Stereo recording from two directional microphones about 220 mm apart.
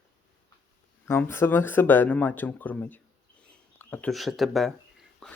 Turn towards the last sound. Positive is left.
turn(degrees=0)  # may be behind; listen again after turning